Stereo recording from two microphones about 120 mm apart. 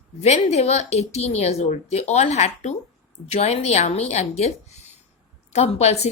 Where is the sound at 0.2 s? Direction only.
65° left (ahead or behind).